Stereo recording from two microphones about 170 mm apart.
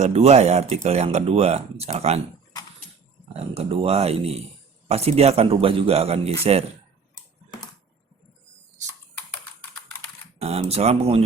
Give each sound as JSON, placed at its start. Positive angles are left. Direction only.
{"t": 0.0, "sound": "speech", "side_deg": -40}
{"t": 3.3, "sound": "speech", "side_deg": -35}
{"t": 10.3, "sound": "speech", "side_deg": -40}